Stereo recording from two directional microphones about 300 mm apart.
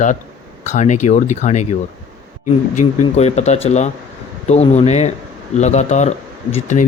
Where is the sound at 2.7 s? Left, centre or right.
Left.